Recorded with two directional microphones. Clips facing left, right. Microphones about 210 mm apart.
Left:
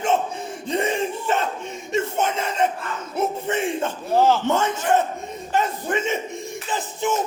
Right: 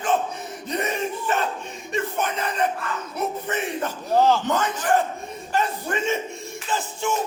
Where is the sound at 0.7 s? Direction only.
25° left (ahead or behind).